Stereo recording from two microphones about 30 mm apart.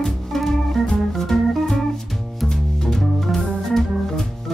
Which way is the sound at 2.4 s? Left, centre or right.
Centre.